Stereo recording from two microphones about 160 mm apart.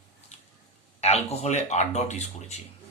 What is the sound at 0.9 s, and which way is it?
Speech, 40° left (ahead or behind).